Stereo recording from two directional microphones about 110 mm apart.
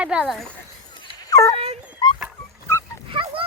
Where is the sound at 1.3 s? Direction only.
30° left (ahead or behind).